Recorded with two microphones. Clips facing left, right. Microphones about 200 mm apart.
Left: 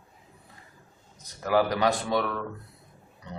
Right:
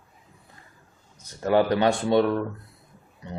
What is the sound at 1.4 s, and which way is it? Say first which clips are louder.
Speech: right 3 dB; 30° right (ahead or behind).